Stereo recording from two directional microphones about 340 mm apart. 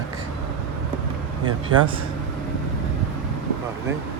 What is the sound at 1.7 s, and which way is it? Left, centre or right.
Speech, right.